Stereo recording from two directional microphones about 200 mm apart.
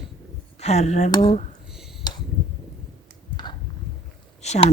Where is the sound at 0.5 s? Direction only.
35° left (ahead or behind).